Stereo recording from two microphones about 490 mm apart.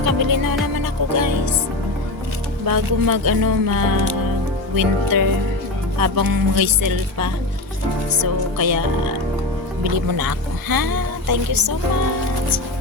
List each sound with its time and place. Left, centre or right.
0.0 s music: right
2.6 s speech: right